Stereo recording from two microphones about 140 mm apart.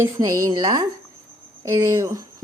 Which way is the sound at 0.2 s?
25° right (ahead or behind).